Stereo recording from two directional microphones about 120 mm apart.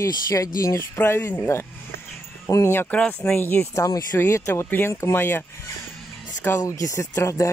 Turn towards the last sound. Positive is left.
turn(degrees=25)  # may be behind; listen again after turning